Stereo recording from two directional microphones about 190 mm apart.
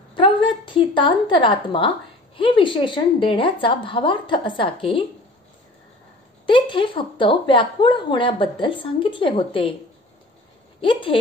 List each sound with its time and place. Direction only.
0.1 s a woman's voice: 25° left (ahead or behind)
6.4 s a woman's voice: 25° left (ahead or behind)
10.8 s a woman's voice: 25° left (ahead or behind)